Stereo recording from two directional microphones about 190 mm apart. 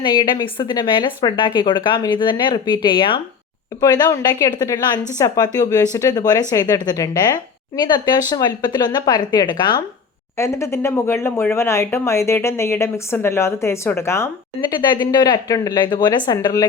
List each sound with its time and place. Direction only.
0.0 s a woman's voice: 25° left (ahead or behind)